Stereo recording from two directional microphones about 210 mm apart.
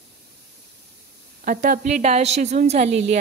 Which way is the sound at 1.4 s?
40° right (ahead or behind).